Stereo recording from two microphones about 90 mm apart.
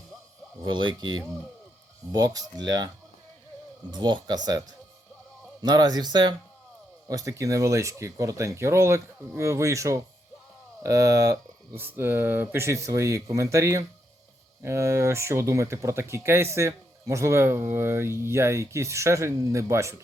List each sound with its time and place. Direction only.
0.6 s speech: 60° right (ahead or behind)
2.1 s speech: 40° right (ahead or behind)
3.9 s speech: 55° right (ahead or behind)
5.6 s speech: 45° right (ahead or behind)
7.1 s speech: 40° right (ahead or behind)
11.8 s speech: 25° right (ahead or behind)